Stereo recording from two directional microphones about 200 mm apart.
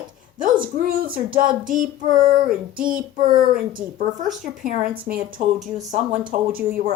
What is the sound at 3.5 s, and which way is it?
Speech, 45° right (ahead or behind).